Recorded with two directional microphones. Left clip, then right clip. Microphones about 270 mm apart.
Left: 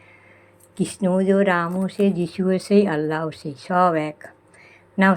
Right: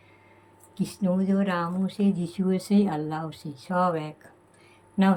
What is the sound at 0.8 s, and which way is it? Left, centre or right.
Speech, centre.